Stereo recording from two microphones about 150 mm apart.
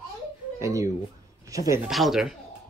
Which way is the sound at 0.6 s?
20° right (ahead or behind).